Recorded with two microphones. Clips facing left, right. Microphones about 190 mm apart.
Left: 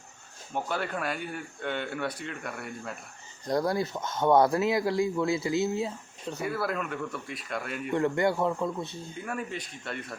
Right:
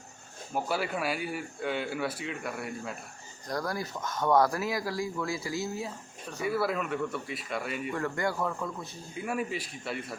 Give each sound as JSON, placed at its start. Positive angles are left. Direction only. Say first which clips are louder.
{"t": 0.5, "sound": "speech", "louder": "right 1 dB", "side_deg": -5}
{"t": 3.4, "sound": "speech", "louder": "left 6 dB", "side_deg": 25}
{"t": 6.4, "sound": "speech", "louder": "right 2 dB", "side_deg": 0}
{"t": 7.9, "sound": "speech", "louder": "left 7 dB", "side_deg": 25}
{"t": 9.2, "sound": "speech", "louder": "right 4 dB", "side_deg": -5}